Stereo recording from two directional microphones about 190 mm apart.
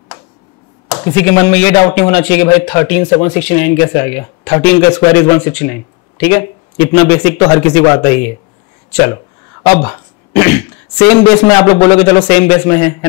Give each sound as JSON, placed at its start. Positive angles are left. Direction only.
{"t": 1.1, "sound": "speech", "side_deg": 10}